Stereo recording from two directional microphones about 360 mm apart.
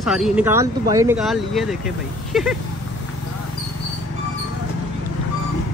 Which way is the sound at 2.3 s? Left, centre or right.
Centre.